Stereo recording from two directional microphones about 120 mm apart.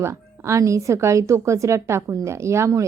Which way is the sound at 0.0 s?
25° right (ahead or behind).